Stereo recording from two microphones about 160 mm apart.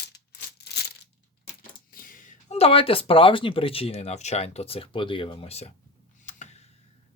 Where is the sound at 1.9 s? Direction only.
60° left (ahead or behind).